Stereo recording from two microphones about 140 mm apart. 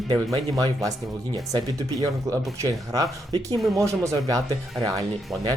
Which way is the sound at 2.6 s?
25° right (ahead or behind).